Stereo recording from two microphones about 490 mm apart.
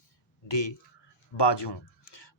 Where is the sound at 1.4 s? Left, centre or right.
Left.